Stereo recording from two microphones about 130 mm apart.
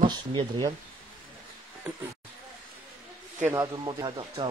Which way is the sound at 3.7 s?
35° right (ahead or behind).